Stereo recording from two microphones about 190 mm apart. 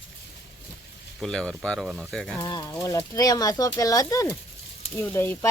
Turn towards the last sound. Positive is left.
turn(degrees=10)  # may be behind; listen again after turning